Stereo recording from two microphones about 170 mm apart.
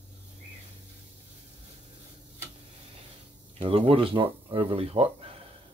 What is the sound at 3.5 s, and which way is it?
Speech, 35° right (ahead or behind).